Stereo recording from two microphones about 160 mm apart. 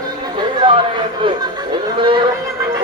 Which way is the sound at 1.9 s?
30° right (ahead or behind).